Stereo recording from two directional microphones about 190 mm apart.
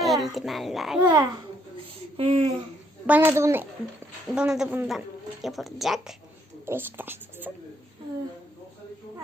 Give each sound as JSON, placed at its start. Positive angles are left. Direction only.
{"t": 0.0, "sound": "a child's voice", "side_deg": 0}
{"t": 1.0, "sound": "speech", "side_deg": -20}
{"t": 3.1, "sound": "speech", "side_deg": -10}